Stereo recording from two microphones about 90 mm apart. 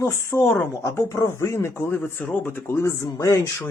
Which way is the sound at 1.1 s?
35° left (ahead or behind).